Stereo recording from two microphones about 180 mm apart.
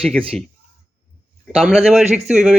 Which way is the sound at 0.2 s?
5° left (ahead or behind).